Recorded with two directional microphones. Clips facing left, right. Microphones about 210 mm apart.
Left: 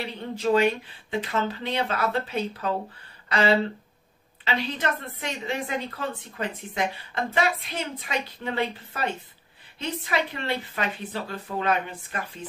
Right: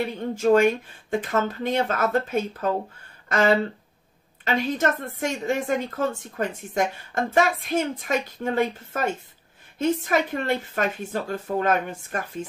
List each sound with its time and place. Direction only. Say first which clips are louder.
0.0 s a woman's voice: right 5 dB; 50° right (ahead or behind)